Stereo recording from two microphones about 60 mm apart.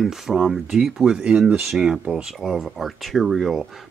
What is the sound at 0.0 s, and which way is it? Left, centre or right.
Speech, centre.